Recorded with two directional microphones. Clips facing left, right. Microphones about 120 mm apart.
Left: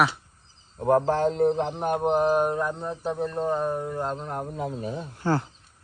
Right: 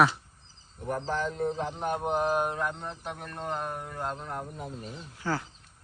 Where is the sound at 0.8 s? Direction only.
60° left (ahead or behind); by 4.0 s 25° left (ahead or behind).